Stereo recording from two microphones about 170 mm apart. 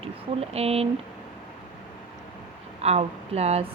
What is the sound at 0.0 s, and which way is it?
Speech, 35° right (ahead or behind).